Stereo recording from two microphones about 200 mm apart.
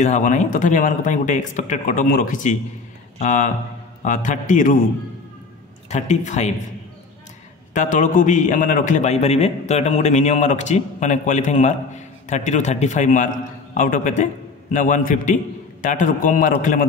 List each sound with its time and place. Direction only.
0.0 s a man's voice: 35° left (ahead or behind)
5.9 s a man's voice: 35° left (ahead or behind)
7.7 s a man's voice: 35° left (ahead or behind)